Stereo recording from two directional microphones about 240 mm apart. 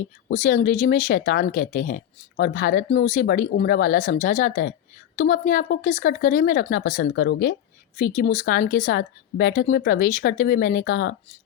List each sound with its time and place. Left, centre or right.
0.3 s speech: left
7.9 s speech: left